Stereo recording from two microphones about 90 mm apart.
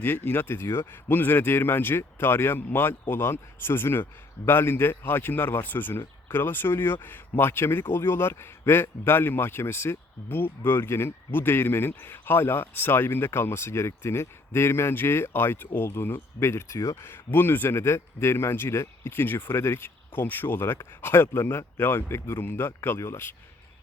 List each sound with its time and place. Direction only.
0.0 s speech: 25° left (ahead or behind)